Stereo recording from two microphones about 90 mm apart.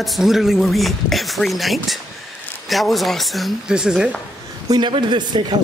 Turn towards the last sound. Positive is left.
turn(degrees=-60)  # may be behind; listen again after turning